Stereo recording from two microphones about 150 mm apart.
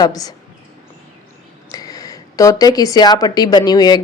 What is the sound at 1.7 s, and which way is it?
Speech, 25° left (ahead or behind).